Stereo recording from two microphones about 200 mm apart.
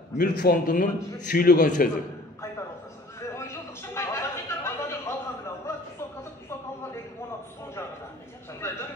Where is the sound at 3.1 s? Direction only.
15° left (ahead or behind).